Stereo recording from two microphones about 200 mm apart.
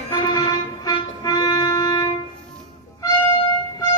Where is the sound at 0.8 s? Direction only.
20° left (ahead or behind).